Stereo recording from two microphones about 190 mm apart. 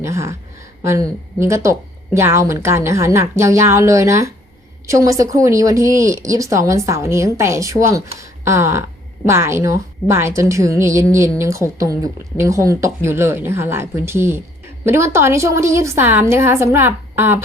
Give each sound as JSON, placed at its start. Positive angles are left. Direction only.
{"t": 0.0, "sound": "a woman's voice", "side_deg": -15}